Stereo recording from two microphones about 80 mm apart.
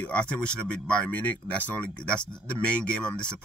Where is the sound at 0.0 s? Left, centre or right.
Centre.